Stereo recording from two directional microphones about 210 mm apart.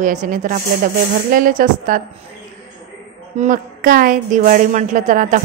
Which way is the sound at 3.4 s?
40° right (ahead or behind).